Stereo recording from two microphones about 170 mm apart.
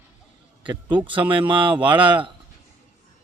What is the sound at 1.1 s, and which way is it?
Speech, 30° right (ahead or behind).